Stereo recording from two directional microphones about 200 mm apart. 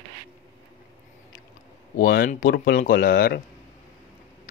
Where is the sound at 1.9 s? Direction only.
45° left (ahead or behind).